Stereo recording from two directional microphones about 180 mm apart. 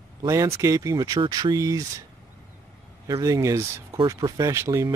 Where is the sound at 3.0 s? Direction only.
20° right (ahead or behind).